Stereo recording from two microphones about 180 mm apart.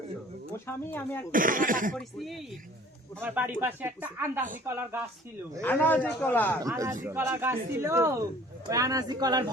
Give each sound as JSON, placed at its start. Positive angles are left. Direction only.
{"t": 0.5, "sound": "a man's voice", "side_deg": 10}
{"t": 1.3, "sound": "speech", "side_deg": -50}
{"t": 2.0, "sound": "speech", "side_deg": 0}
{"t": 3.2, "sound": "speech", "side_deg": -10}
{"t": 5.6, "sound": "a man's voice", "side_deg": 10}
{"t": 6.6, "sound": "speech", "side_deg": -20}